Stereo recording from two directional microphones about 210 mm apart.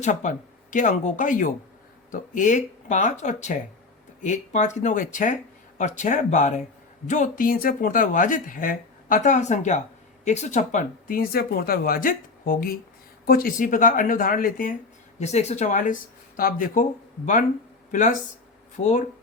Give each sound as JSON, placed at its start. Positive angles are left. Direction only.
{"t": 0.0, "sound": "speech", "side_deg": 35}
{"t": 15.2, "sound": "speech", "side_deg": 30}
{"t": 17.9, "sound": "speech", "side_deg": 35}